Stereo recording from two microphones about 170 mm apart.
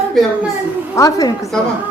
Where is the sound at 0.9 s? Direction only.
20° left (ahead or behind).